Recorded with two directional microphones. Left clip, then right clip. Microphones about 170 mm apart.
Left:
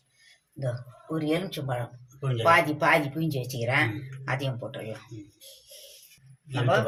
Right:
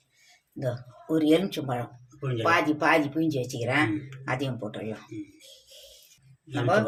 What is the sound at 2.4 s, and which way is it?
Speech, 45° right (ahead or behind).